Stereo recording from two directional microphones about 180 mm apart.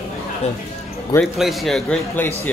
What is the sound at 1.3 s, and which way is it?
Speech, centre (ahead or behind).